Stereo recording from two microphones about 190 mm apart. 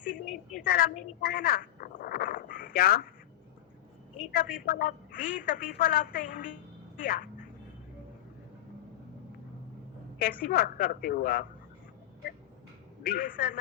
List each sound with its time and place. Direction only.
0.6 s speech: 50° left (ahead or behind)
4.3 s a woman's voice: 50° left (ahead or behind)
10.2 s a woman's voice: 50° left (ahead or behind)
13.1 s a woman's voice: 45° left (ahead or behind)